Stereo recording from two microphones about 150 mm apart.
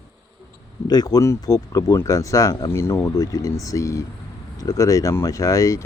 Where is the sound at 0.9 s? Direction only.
25° left (ahead or behind).